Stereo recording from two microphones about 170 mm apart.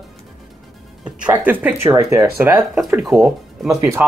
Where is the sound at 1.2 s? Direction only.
10° right (ahead or behind).